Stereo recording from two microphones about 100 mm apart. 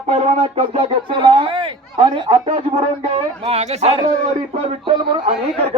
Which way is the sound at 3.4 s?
90° right.